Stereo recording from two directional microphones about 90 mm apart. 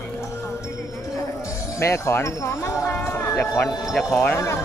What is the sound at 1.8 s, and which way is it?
Speech, 30° left (ahead or behind).